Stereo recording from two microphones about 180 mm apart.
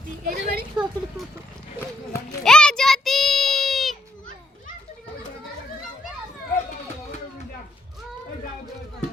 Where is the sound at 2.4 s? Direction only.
5° left (ahead or behind).